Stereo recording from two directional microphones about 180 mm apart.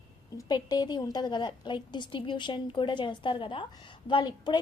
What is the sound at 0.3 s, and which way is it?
A woman's voice, 20° left (ahead or behind).